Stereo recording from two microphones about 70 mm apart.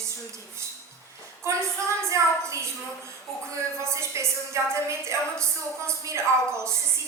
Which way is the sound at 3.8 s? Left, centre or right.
Right.